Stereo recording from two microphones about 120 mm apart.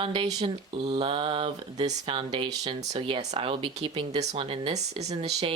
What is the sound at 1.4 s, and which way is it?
Speech, 70° right (ahead or behind).